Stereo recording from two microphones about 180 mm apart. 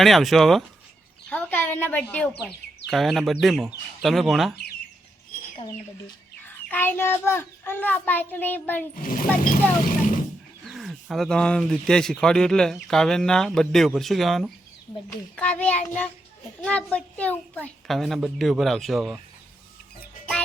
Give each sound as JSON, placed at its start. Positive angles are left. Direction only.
{"t": 0.0, "sound": "a woman's voice", "side_deg": 0}
{"t": 5.5, "sound": "speech", "side_deg": 25}
{"t": 6.4, "sound": "a child's voice", "side_deg": 10}
{"t": 9.0, "sound": "speech", "side_deg": 50}
{"t": 10.7, "sound": "a child's voice", "side_deg": 0}